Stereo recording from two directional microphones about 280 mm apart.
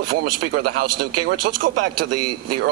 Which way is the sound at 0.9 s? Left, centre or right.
Right.